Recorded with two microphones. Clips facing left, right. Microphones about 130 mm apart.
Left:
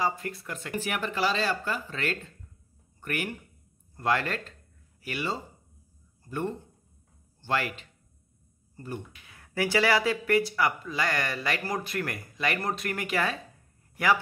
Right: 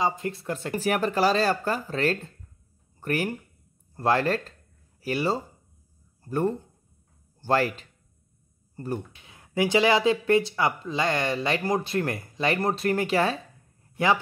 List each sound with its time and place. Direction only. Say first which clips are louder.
0.0 s speech: right 3 dB; 20° right (ahead or behind); by 9.0 s 40° right (ahead or behind)
9.1 s speech: right 5 dB; 25° right (ahead or behind)